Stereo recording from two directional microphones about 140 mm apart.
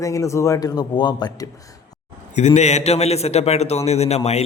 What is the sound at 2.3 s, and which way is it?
A man's voice, 55° left (ahead or behind).